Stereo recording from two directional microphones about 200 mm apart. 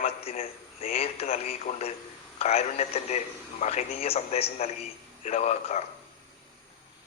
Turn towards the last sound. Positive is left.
turn(degrees=35)  # may be behind; listen again after turning